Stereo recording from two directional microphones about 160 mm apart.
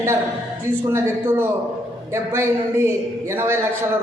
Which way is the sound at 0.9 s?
15° right (ahead or behind).